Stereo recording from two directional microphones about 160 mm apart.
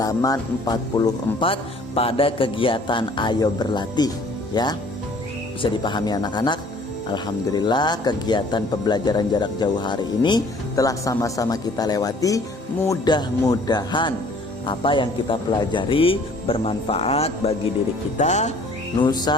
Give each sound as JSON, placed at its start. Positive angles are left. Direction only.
{"t": 0.0, "sound": "speech", "side_deg": 20}
{"t": 5.8, "sound": "speech", "side_deg": 25}
{"t": 18.2, "sound": "music", "side_deg": 45}
{"t": 18.9, "sound": "speech", "side_deg": 25}